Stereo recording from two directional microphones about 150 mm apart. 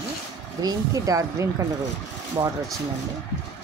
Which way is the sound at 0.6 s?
25° right (ahead or behind).